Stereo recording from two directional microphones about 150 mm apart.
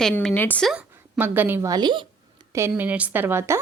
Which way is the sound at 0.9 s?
15° right (ahead or behind).